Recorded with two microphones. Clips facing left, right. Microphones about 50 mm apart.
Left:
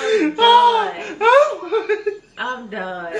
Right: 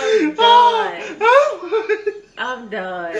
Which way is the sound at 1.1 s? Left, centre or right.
Centre.